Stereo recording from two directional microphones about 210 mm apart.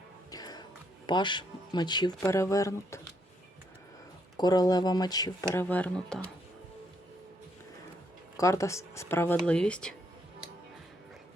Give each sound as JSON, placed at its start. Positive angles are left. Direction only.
{"t": 0.3, "sound": "music", "side_deg": 20}
{"t": 1.0, "sound": "speech", "side_deg": 20}
{"t": 4.4, "sound": "speech", "side_deg": 20}
{"t": 5.5, "sound": "speech", "side_deg": 5}
{"t": 8.4, "sound": "speech", "side_deg": 15}